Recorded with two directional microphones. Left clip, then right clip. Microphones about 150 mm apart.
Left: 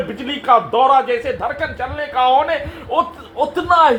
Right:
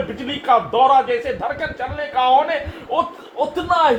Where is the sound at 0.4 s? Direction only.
25° left (ahead or behind).